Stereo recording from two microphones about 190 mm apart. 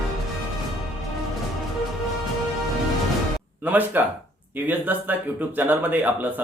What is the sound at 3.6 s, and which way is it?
Speech, 10° right (ahead or behind).